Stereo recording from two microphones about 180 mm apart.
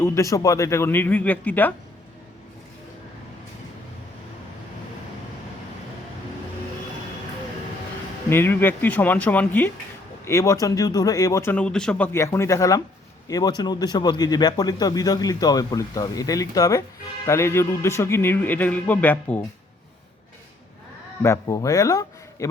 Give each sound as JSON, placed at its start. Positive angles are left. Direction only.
{"t": 0.0, "sound": "speech", "side_deg": 15}
{"t": 8.3, "sound": "speech", "side_deg": 10}
{"t": 21.2, "sound": "speech", "side_deg": 15}